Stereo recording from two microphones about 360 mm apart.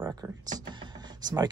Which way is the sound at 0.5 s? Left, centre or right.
Centre.